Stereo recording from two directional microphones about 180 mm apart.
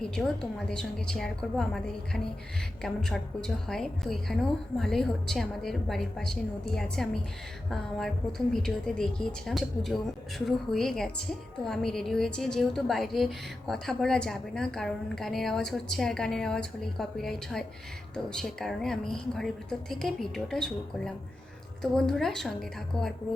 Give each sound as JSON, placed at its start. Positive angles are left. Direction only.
{"t": 0.2, "sound": "a woman's voice", "side_deg": 0}